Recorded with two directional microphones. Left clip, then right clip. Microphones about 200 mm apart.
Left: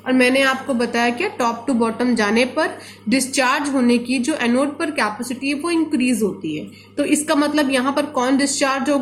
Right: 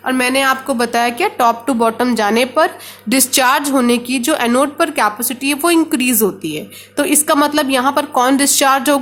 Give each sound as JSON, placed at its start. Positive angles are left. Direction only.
{"t": 0.0, "sound": "a woman's voice", "side_deg": -50}